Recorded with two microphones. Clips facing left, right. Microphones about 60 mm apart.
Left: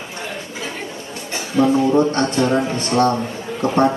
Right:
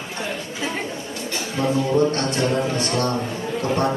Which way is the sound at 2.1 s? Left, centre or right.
Left.